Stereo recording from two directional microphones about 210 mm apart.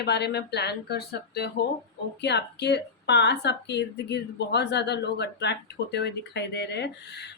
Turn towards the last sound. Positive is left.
turn(degrees=55)  # may be behind; listen again after turning